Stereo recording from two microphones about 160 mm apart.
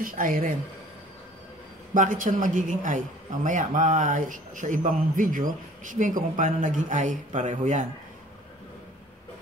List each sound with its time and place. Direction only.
0.0 s speech: 60° right (ahead or behind)
2.0 s a man's voice: 55° right (ahead or behind)